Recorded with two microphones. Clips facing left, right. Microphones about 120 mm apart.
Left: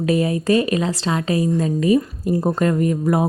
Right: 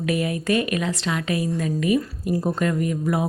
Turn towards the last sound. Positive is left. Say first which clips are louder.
# left 5 dB
turn(degrees=40)  # may be behind; listen again after turning